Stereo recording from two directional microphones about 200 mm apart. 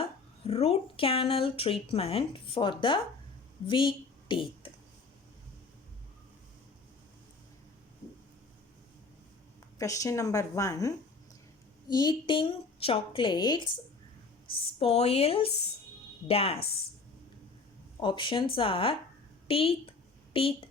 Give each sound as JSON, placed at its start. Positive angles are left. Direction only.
{"t": 0.0, "sound": "a woman's voice", "side_deg": 30}
{"t": 9.7, "sound": "speech", "side_deg": 15}
{"t": 18.0, "sound": "a woman's voice", "side_deg": 25}